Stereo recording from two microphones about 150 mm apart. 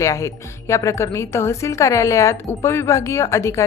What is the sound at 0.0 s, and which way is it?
Speech, 20° left (ahead or behind).